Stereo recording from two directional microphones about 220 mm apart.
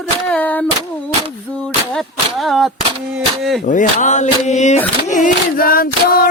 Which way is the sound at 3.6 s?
35° left (ahead or behind).